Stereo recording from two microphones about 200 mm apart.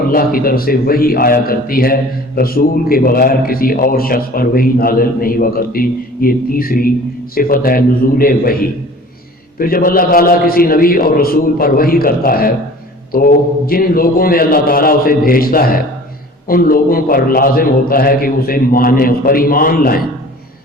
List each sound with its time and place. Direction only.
0.1 s a man's voice: 45° left (ahead or behind)